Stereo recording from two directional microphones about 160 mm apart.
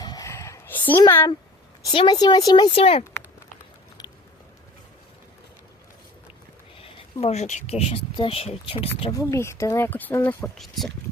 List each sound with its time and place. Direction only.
0.0 s a sound: 25° left (ahead or behind)
1.0 s speech: 15° left (ahead or behind)
1.9 s speech: 30° left (ahead or behind)
7.2 s speech: 40° left (ahead or behind)
9.1 s speech: 20° left (ahead or behind); by 10.9 s centre (ahead or behind)